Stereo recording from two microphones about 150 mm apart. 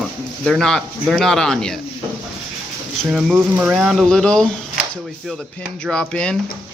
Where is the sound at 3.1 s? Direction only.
5° right (ahead or behind).